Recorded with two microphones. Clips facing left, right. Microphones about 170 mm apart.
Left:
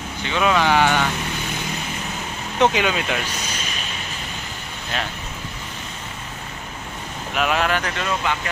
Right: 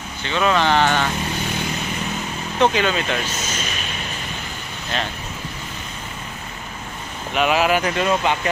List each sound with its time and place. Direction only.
0.2 s speech: 10° left (ahead or behind)
2.6 s speech: 15° left (ahead or behind)
4.9 s speech: 5° left (ahead or behind)
7.3 s speech: 5° right (ahead or behind)
8.1 s speech: 25° right (ahead or behind)